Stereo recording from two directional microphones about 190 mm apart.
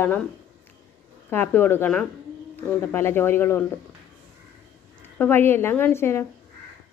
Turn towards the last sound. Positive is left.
turn(degrees=15)  # may be behind; listen again after turning